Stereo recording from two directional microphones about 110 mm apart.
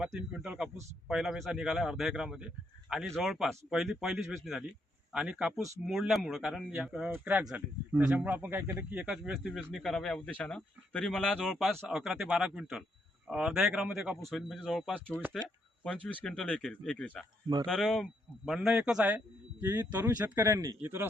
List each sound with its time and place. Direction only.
0.0 s a man's voice: 5° right (ahead or behind)
9.0 s a man's voice: 5° right (ahead or behind); by 21.1 s 20° right (ahead or behind)